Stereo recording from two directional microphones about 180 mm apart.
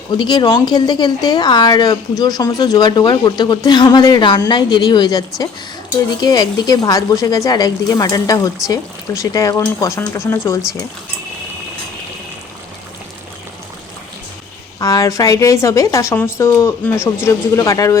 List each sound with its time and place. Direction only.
0.1 s a woman's voice: 25° left (ahead or behind)
14.8 s a woman's voice: 20° left (ahead or behind)